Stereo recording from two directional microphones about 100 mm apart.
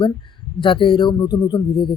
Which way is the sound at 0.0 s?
55° left (ahead or behind).